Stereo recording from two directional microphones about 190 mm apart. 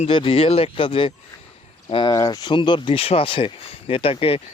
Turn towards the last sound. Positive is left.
turn(degrees=30)  # may be behind; listen again after turning